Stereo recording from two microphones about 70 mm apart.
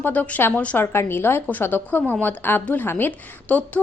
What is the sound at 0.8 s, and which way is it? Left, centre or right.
A woman's voice, left.